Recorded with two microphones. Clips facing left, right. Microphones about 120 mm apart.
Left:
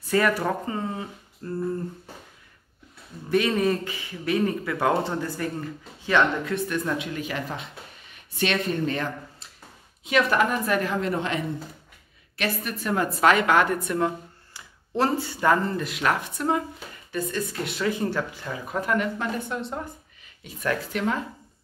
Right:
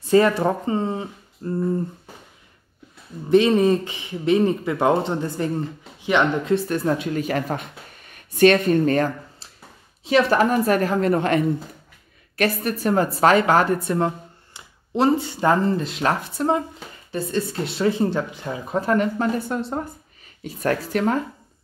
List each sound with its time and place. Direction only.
0.0 s speech: 25° right (ahead or behind)
3.3 s speech: 25° right (ahead or behind)
6.5 s speech: 35° right (ahead or behind)
10.0 s a woman's voice: 35° right (ahead or behind)